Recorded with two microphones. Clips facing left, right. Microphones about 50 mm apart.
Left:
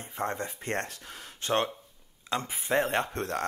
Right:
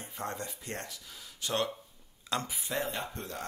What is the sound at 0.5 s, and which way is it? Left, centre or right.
Speech, left.